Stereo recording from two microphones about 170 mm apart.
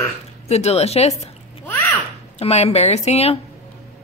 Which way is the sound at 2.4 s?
40° left (ahead or behind).